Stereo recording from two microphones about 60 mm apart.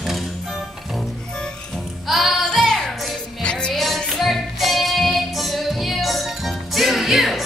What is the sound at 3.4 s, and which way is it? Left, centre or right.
Music, centre.